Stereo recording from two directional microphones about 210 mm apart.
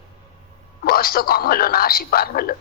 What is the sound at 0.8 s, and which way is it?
A woman's voice, 45° left (ahead or behind).